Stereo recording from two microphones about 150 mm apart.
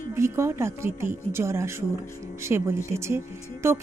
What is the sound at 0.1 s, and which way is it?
Speech, 15° right (ahead or behind).